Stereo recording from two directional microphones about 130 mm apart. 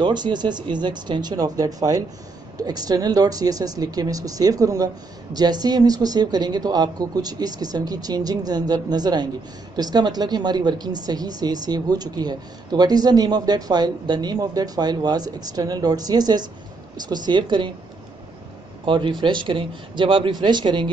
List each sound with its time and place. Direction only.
0.0 s a woman's voice: 35° right (ahead or behind)
18.9 s a woman's voice: 40° right (ahead or behind)